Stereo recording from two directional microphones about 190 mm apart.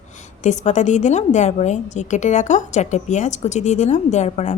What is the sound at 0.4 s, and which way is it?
A woman's voice, 40° left (ahead or behind).